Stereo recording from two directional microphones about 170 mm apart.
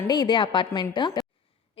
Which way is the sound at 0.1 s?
25° left (ahead or behind).